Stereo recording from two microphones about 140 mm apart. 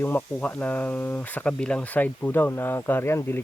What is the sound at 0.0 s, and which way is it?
Speech, 15° left (ahead or behind).